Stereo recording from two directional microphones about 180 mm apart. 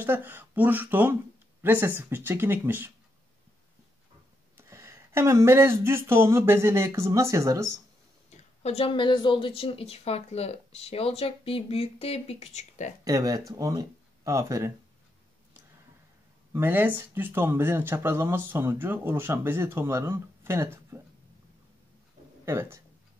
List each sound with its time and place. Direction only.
0.0 s speech: 10° right (ahead or behind)
4.6 s speech: 15° right (ahead or behind)
8.3 s speech: 35° left (ahead or behind)
13.0 s speech: 20° right (ahead or behind)
16.5 s speech: 10° right (ahead or behind)
22.4 s speech: 15° right (ahead or behind)